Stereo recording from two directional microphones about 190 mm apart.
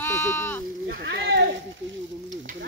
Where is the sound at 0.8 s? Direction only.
55° right (ahead or behind).